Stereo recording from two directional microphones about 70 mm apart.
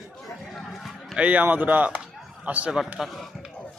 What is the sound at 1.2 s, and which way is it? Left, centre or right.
Speech, right.